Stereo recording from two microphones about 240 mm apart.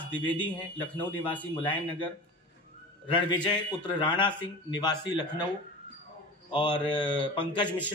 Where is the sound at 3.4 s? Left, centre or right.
Centre.